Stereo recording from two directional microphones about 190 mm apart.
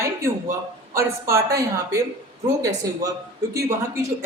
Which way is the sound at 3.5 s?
15° right (ahead or behind).